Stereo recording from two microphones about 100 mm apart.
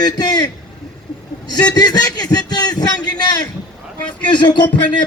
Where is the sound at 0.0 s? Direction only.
45° left (ahead or behind).